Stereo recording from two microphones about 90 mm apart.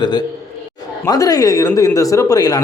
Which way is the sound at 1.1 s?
40° left (ahead or behind).